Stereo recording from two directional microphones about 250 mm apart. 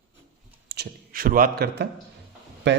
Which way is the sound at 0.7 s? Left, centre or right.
Right.